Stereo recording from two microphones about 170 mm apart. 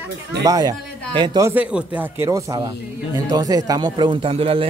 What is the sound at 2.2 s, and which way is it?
Speech, 20° right (ahead or behind).